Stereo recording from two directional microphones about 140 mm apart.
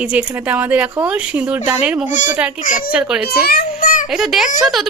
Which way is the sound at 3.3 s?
90° left.